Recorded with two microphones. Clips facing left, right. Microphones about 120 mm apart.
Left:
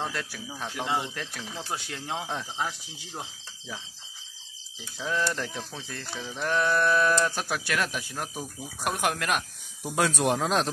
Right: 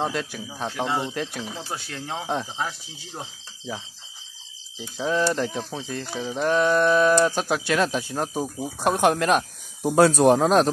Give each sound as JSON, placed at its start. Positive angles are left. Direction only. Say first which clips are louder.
{"t": 0.0, "sound": "speech", "louder": "right 6 dB", "side_deg": -20}
{"t": 1.7, "sound": "speech", "louder": "right 2 dB", "side_deg": 10}
{"t": 3.2, "sound": "speech", "louder": "right 2 dB", "side_deg": -25}